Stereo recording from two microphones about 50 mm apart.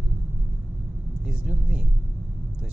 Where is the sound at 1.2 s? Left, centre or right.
Centre.